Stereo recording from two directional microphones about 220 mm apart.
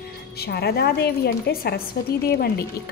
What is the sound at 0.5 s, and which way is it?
A woman's voice, 45° left (ahead or behind).